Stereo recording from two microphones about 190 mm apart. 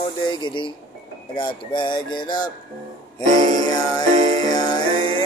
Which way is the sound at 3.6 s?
20° left (ahead or behind).